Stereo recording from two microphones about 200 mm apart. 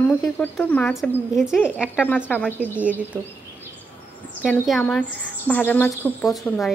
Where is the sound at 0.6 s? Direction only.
5° left (ahead or behind).